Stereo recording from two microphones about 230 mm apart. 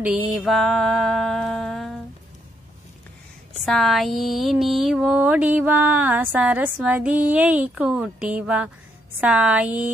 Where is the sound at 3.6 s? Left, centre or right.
Centre.